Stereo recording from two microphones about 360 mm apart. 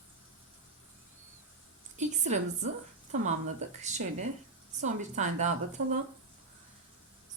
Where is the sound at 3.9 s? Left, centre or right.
Centre.